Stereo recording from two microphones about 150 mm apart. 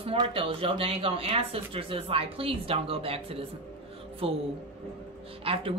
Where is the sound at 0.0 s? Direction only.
40° right (ahead or behind).